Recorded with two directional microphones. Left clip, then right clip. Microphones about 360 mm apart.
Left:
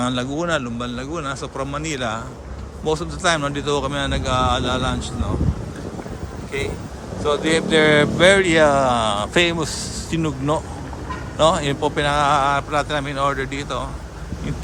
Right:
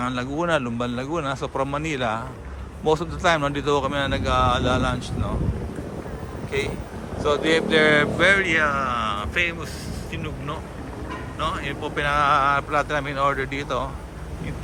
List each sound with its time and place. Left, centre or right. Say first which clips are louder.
0.0 s speech: left 2 dB; centre
7.3 s speech: left 1 dB; centre